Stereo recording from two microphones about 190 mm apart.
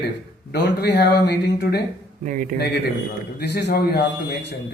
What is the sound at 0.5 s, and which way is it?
Speech, 60° left (ahead or behind).